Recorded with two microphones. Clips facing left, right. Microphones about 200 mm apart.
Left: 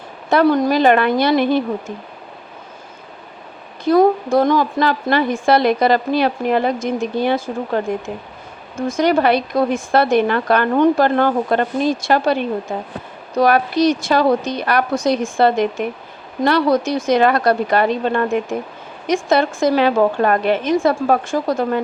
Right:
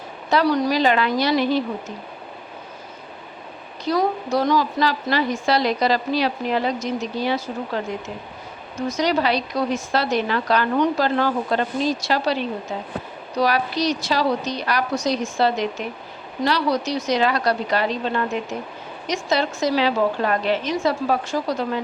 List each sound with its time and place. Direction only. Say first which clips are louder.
0.3 s a woman's voice: left 5 dB; 50° left (ahead or behind)
3.8 s a woman's voice: left 8 dB; 50° left (ahead or behind)